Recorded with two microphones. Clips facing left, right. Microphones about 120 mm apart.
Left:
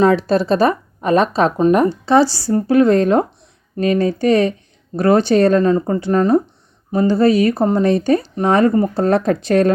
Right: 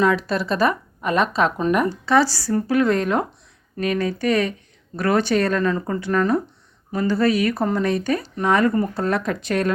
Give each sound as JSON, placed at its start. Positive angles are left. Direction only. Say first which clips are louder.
{"t": 0.0, "sound": "speech", "louder": "left 6 dB", "side_deg": 35}